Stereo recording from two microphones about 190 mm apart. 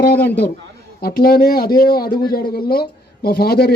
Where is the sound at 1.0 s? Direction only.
50° left (ahead or behind).